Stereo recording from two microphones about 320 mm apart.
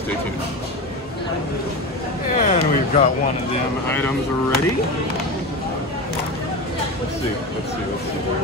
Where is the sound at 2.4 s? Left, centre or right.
Left.